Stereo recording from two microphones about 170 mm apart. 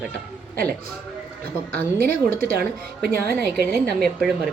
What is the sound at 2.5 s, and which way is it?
A woman's voice, 65° right (ahead or behind).